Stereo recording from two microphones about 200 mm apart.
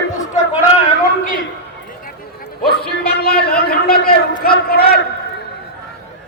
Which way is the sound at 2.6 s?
50° left (ahead or behind).